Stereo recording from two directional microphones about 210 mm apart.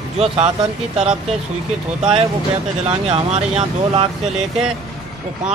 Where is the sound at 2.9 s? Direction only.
30° right (ahead or behind).